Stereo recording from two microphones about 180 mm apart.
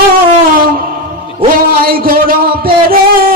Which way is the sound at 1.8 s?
55° right (ahead or behind).